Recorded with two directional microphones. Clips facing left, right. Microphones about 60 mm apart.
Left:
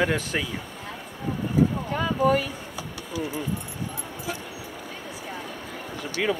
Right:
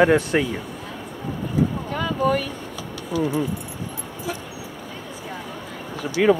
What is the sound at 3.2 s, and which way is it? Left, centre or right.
Speech, centre.